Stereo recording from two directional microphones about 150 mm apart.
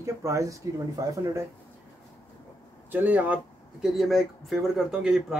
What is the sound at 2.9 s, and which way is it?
Speech, 10° right (ahead or behind).